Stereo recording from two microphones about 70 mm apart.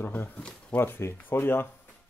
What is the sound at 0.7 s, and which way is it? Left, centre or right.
Speech, left.